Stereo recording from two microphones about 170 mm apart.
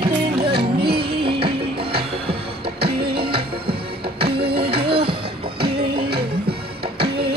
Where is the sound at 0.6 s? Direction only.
70° right (ahead or behind).